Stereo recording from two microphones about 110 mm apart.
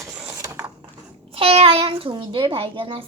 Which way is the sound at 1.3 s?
60° right (ahead or behind).